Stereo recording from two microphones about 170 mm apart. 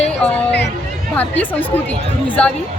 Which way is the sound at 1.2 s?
10° left (ahead or behind).